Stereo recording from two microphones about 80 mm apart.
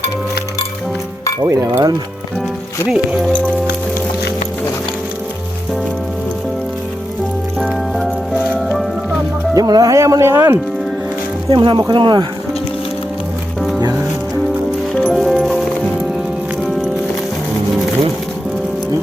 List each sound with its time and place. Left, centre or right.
1.5 s speech: right
2.8 s speech: centre
7.9 s music: centre
9.6 s speech: right
11.5 s speech: right
11.8 s speech: right
15.1 s music: centre